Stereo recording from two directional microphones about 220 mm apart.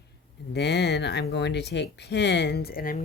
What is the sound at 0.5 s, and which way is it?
Speech, 50° left (ahead or behind).